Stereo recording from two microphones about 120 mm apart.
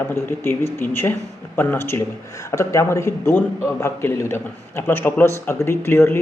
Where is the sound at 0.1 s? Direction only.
20° left (ahead or behind).